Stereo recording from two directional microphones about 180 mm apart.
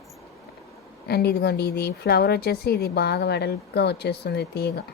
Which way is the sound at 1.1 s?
65° left (ahead or behind).